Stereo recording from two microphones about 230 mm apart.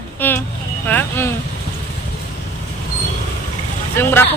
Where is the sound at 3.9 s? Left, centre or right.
Centre.